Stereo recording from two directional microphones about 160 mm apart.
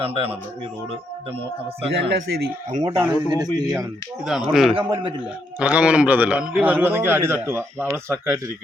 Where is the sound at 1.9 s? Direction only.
90° right.